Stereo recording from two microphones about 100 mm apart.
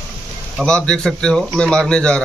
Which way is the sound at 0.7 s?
10° left (ahead or behind).